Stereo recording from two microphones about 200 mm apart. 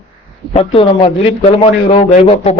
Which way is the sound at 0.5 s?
30° left (ahead or behind).